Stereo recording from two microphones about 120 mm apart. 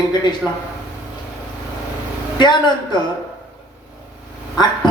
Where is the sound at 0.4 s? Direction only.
5° right (ahead or behind).